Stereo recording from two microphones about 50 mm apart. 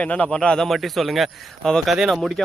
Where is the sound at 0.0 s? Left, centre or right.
Left.